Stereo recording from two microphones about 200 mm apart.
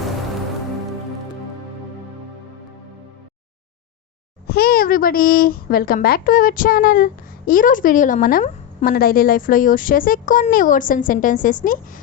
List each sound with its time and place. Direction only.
4.4 s a child's voice: 50° left (ahead or behind)